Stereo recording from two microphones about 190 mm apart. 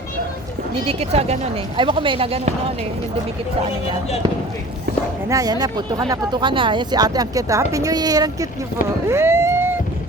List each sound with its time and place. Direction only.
0.9 s speech: 30° right (ahead or behind)
5.3 s speech: 20° right (ahead or behind)
9.0 s vehicle: 15° right (ahead or behind)